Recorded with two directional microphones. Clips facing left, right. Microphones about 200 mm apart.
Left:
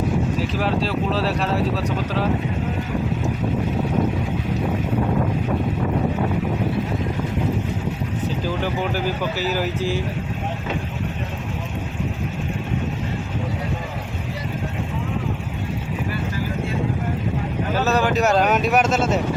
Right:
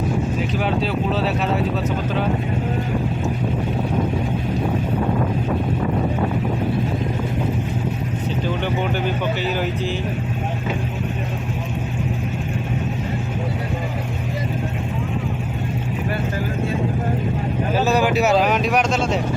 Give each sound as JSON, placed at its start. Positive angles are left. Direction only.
{"t": 0.6, "sound": "speech", "side_deg": 0}
{"t": 8.6, "sound": "speech", "side_deg": 5}
{"t": 17.7, "sound": "speech", "side_deg": -10}